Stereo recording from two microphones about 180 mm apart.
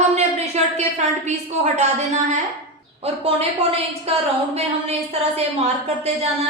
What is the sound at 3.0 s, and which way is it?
A woman's voice, 35° right (ahead or behind).